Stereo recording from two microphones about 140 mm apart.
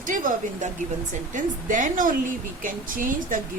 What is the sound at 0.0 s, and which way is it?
A woman's voice, 70° right (ahead or behind).